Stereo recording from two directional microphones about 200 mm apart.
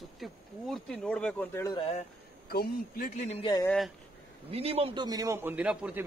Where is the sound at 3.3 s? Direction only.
25° left (ahead or behind).